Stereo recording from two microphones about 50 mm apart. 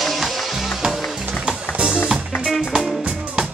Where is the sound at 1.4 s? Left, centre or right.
Right.